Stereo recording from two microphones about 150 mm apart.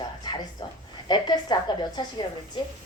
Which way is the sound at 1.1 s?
30° left (ahead or behind).